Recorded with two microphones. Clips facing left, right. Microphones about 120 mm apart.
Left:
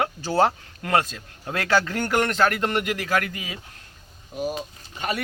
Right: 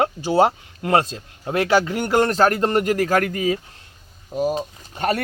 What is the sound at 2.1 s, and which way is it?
Speech, 35° right (ahead or behind).